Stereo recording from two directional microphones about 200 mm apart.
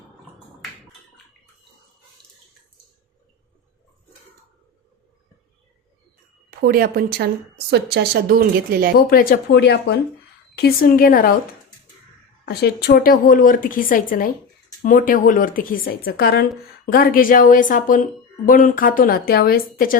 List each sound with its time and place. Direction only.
6.6 s speech: 50° right (ahead or behind)
9.0 s speech: 50° left (ahead or behind)
12.5 s speech: 55° left (ahead or behind)